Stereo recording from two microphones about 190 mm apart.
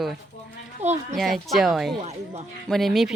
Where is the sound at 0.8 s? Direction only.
35° right (ahead or behind).